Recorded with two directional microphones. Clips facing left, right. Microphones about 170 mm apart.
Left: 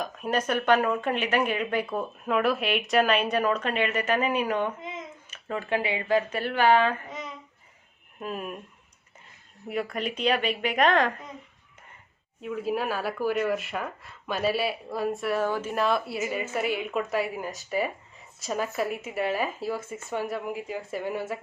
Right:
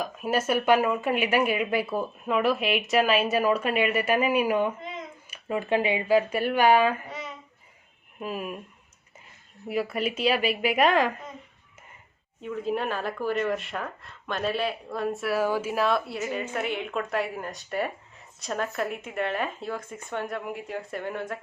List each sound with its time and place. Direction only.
0.0 s speech: 5° right (ahead or behind)
8.2 s speech: 5° right (ahead or behind)
9.6 s speech: 5° right (ahead or behind)
12.4 s speech: 5° left (ahead or behind)